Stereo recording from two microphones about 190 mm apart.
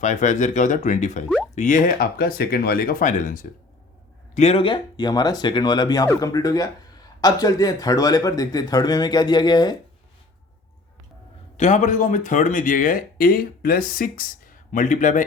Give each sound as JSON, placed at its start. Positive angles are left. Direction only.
{"t": 0.0, "sound": "speech", "side_deg": 40}
{"t": 4.4, "sound": "speech", "side_deg": 30}
{"t": 11.5, "sound": "speech", "side_deg": 40}